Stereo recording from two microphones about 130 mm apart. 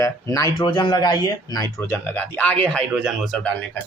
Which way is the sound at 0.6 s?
35° left (ahead or behind).